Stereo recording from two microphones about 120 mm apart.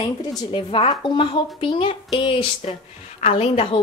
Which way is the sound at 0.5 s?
50° left (ahead or behind).